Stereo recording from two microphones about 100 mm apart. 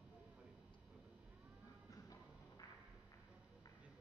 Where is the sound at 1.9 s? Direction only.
35° left (ahead or behind).